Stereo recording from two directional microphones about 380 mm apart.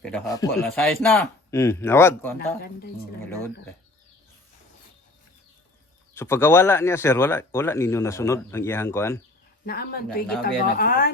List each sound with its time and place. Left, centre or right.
0.0 s speech: centre
6.1 s speech: centre
9.6 s a woman's voice: left